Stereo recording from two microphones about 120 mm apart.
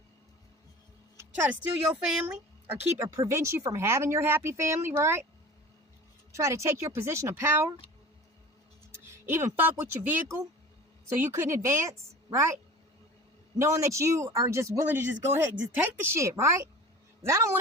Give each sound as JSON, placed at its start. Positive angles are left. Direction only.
{"t": 1.1, "sound": "music", "side_deg": -25}
{"t": 1.9, "sound": "speech", "side_deg": -5}
{"t": 3.0, "sound": "speech", "side_deg": -25}
{"t": 6.3, "sound": "speech", "side_deg": -25}
{"t": 8.9, "sound": "speech", "side_deg": -20}
{"t": 10.2, "sound": "speech", "side_deg": -30}
{"t": 13.6, "sound": "speech", "side_deg": -25}